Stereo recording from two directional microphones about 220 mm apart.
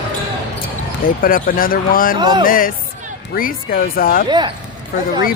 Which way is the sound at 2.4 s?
40° left (ahead or behind).